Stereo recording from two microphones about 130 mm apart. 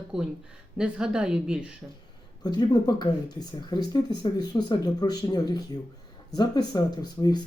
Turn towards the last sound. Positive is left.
turn(degrees=35)  # may be behind; listen again after turning